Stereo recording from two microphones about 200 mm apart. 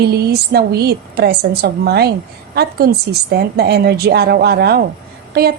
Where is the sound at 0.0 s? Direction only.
50° right (ahead or behind).